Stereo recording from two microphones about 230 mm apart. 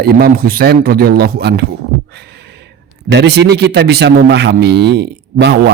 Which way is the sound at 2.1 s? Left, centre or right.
Right.